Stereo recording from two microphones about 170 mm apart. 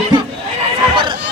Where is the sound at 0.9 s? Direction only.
30° right (ahead or behind).